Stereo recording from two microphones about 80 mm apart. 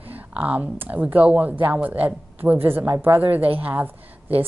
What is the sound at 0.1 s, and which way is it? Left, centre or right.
A woman's voice, centre.